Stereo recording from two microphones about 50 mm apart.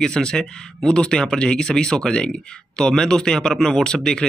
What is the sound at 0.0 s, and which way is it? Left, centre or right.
Speech, centre.